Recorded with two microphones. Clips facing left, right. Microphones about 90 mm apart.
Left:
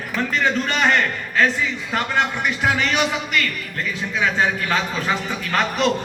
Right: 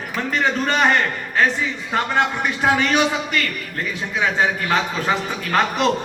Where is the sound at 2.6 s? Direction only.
30° right (ahead or behind).